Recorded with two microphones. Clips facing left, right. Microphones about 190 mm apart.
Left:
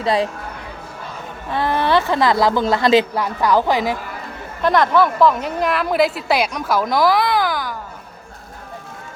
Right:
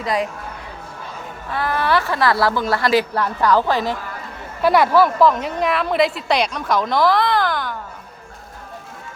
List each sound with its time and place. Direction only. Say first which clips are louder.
0.0 s speech: left 3 dB; 30° left (ahead or behind)
1.5 s speech: left 2 dB; 25° left (ahead or behind)
4.6 s a woman's voice: right 1 dB; 10° right (ahead or behind)